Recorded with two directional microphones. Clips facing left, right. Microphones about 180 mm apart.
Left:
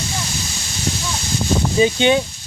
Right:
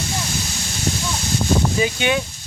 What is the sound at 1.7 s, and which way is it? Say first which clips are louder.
Speech: left 5 dB; 25° left (ahead or behind).